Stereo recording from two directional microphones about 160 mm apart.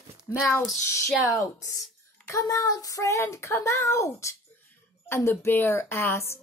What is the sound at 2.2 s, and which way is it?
Speech, 20° left (ahead or behind).